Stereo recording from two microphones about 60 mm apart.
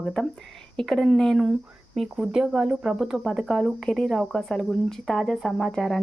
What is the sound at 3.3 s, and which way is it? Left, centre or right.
Speech, centre.